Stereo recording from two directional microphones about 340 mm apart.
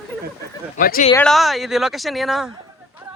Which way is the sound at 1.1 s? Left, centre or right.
Centre.